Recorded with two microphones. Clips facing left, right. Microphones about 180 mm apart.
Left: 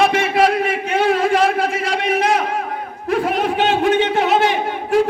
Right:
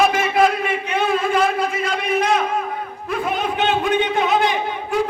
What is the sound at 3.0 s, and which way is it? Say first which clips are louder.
A man's voice: left 5 dB; 80° left.